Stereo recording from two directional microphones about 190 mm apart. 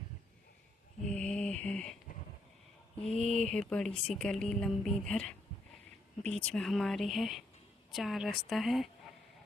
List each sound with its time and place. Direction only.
1.0 s a sound: 5° left (ahead or behind)
3.0 s speech: 35° left (ahead or behind)
3.5 s speech: 5° left (ahead or behind)
6.4 s speech: 5° left (ahead or behind)